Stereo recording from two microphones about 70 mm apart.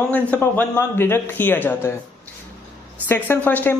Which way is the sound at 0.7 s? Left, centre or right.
Left.